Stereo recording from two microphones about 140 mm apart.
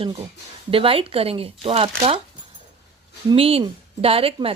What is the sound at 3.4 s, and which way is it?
Speech, 45° right (ahead or behind).